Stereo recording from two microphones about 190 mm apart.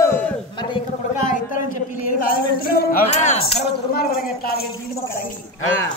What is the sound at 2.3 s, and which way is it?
Music, 50° left (ahead or behind).